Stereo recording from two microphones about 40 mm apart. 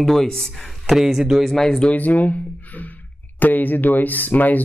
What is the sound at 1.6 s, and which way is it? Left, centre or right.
Speech, centre.